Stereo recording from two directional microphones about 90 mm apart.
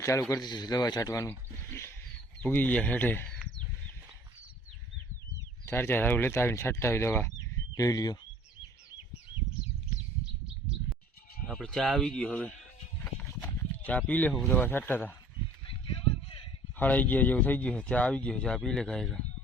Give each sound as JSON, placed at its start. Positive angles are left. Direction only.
{"t": 0.0, "sound": "a man's voice", "side_deg": 35}
{"t": 0.3, "sound": "a man's voice", "side_deg": 50}
{"t": 2.4, "sound": "speech", "side_deg": 20}
{"t": 5.6, "sound": "speech", "side_deg": 25}
{"t": 11.4, "sound": "speech", "side_deg": 5}
{"t": 13.1, "sound": "a sound", "side_deg": 15}
{"t": 14.5, "sound": "speech", "side_deg": 20}
{"t": 16.0, "sound": "a sound", "side_deg": 90}
{"t": 16.7, "sound": "speech", "side_deg": 20}